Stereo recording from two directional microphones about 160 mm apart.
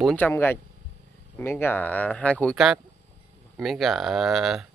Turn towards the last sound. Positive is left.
turn(degrees=0)  # may be behind; listen again after turning